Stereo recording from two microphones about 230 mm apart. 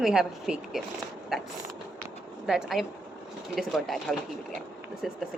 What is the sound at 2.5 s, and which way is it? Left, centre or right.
Speech, centre.